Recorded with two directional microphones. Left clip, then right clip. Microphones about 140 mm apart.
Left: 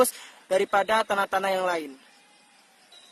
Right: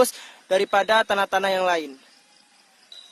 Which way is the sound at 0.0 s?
45° right (ahead or behind).